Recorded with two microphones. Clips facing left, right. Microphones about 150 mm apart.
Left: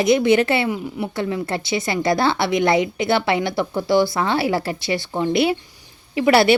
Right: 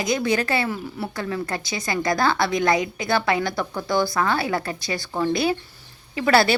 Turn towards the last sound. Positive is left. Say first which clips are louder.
# left 4 dB
turn(degrees=25)  # may be behind; listen again after turning